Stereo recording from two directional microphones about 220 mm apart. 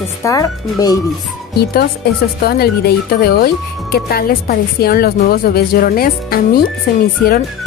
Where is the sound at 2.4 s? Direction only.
45° left (ahead or behind).